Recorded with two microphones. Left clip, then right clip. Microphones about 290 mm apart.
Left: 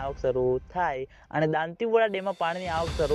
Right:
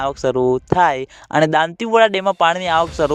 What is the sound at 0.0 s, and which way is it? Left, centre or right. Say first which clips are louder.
Speech: right 9 dB; right.